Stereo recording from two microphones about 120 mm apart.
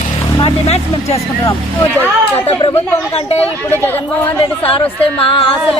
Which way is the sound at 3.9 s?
20° left (ahead or behind).